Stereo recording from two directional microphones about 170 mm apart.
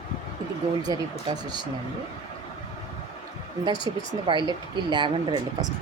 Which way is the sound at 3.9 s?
25° right (ahead or behind).